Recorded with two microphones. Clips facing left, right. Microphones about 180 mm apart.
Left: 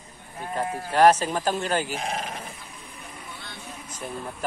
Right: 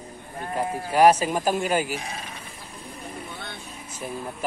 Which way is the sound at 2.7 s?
30° right (ahead or behind).